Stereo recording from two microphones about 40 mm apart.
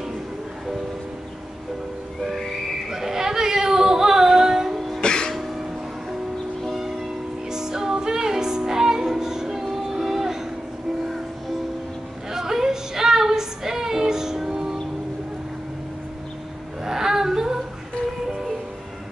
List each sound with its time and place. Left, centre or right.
2.9 s female singing: centre
4.7 s music: centre
5.0 s music: centre
7.5 s music: centre
12.3 s a sound: centre
16.8 s music: centre